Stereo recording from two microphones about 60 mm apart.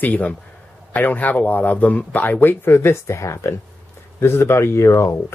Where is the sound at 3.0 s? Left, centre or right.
Left.